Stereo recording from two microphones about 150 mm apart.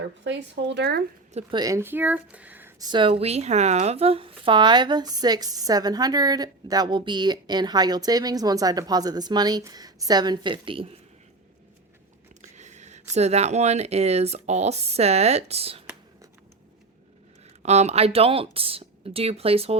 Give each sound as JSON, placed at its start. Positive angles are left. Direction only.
{"t": 0.6, "sound": "speech", "side_deg": -90}
{"t": 1.5, "sound": "speech", "side_deg": -25}
{"t": 2.7, "sound": "speech", "side_deg": -30}
{"t": 12.5, "sound": "speech", "side_deg": -50}
{"t": 17.6, "sound": "speech", "side_deg": -50}